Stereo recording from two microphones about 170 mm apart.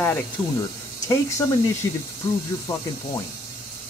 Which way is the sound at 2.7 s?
15° left (ahead or behind).